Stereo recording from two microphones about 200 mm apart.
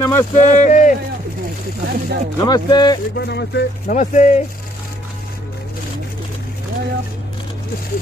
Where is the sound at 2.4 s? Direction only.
20° left (ahead or behind).